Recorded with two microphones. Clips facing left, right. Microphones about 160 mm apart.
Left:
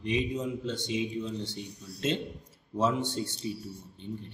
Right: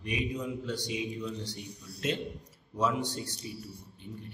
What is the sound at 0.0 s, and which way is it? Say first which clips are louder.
A man's voice: left 4 dB; 25° left (ahead or behind).